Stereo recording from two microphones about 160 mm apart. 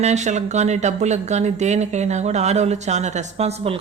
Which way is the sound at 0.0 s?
45° right (ahead or behind).